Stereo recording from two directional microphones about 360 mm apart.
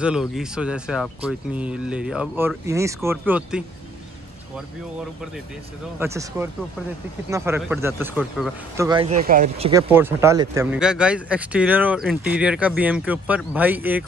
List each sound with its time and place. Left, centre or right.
0.0 s speech: centre
5.9 s speech: centre
8.8 s speech: centre
9.7 s speech: centre